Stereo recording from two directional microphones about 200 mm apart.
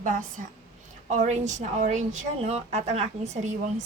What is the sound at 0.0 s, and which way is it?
A woman's voice, 40° right (ahead or behind).